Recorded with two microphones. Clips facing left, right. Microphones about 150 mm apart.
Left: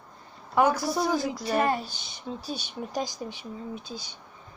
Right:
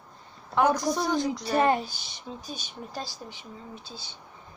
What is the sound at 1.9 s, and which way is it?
Speech, centre (ahead or behind).